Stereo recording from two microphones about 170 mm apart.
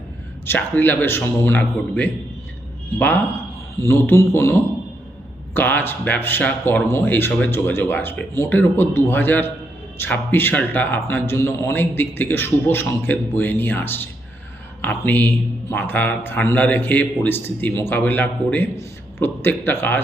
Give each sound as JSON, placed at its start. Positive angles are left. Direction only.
{"t": 0.4, "sound": "a man's voice", "side_deg": 10}